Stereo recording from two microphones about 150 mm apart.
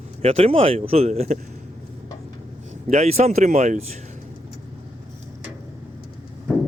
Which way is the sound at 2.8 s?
45° right (ahead or behind).